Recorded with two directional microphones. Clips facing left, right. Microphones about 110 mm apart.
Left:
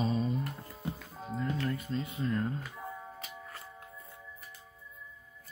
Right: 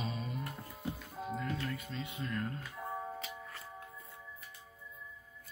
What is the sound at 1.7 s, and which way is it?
Speech, 40° left (ahead or behind).